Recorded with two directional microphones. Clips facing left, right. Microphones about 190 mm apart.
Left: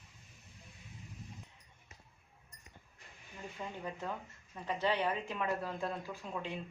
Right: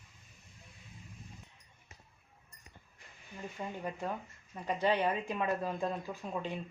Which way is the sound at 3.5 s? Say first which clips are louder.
Right 3 dB; 10° right (ahead or behind).